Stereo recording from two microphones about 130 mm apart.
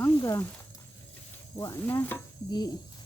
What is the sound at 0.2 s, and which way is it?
Speech, 25° left (ahead or behind).